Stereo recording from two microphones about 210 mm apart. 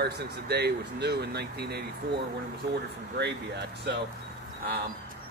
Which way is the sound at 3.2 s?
55° right (ahead or behind).